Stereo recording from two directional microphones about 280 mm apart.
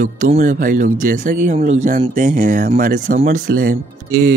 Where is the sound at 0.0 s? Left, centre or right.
Right.